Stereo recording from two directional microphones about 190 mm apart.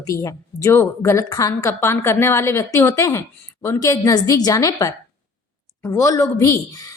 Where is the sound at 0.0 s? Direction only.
15° left (ahead or behind).